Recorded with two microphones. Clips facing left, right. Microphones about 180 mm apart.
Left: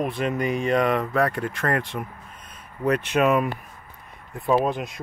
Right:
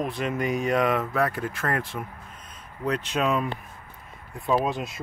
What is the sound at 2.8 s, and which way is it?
Speech, 60° left (ahead or behind).